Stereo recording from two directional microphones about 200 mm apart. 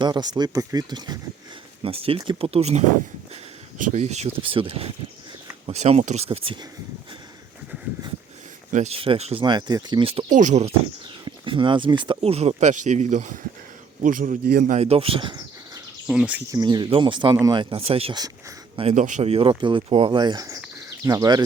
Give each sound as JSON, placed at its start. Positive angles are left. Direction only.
{"t": 0.0, "sound": "speech", "side_deg": -20}
{"t": 8.7, "sound": "speech", "side_deg": -30}
{"t": 16.0, "sound": "speech", "side_deg": -5}
{"t": 16.5, "sound": "speech", "side_deg": -20}
{"t": 18.8, "sound": "speech", "side_deg": -35}